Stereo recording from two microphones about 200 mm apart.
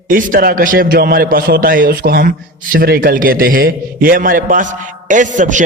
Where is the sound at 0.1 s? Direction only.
45° right (ahead or behind).